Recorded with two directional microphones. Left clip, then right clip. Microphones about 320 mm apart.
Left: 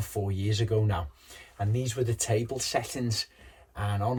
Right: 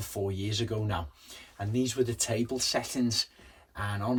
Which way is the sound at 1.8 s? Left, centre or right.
Centre.